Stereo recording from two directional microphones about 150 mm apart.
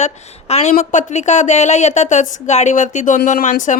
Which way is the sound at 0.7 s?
55° left (ahead or behind).